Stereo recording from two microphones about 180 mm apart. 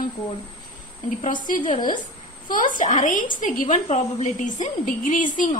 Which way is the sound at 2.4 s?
50° left (ahead or behind).